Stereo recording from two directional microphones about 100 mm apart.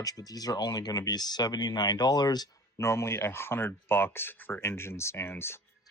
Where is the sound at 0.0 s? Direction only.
40° left (ahead or behind).